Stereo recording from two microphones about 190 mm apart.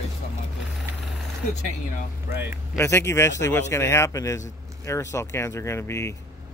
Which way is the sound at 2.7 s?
15° left (ahead or behind).